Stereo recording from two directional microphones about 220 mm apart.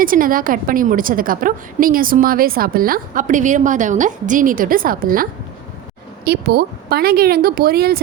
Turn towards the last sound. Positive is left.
turn(degrees=-45)  # may be behind; listen again after turning